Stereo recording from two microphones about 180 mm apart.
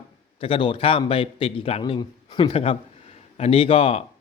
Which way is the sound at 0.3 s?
30° left (ahead or behind).